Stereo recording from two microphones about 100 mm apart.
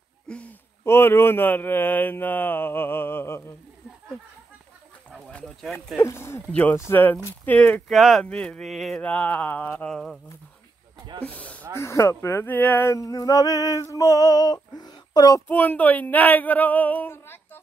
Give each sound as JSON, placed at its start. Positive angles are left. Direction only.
{"t": 0.3, "sound": "a sound", "side_deg": 15}
{"t": 0.8, "sound": "speech", "side_deg": 25}
{"t": 5.4, "sound": "speech", "side_deg": 0}
{"t": 5.9, "sound": "speech", "side_deg": 25}
{"t": 7.9, "sound": "speech", "side_deg": 0}
{"t": 9.0, "sound": "speech", "side_deg": 15}
{"t": 9.8, "sound": "speech", "side_deg": 5}
{"t": 11.2, "sound": "a sound", "side_deg": 15}
{"t": 11.7, "sound": "speech", "side_deg": 30}
{"t": 12.9, "sound": "a sound", "side_deg": 35}
{"t": 15.4, "sound": "speech", "side_deg": 20}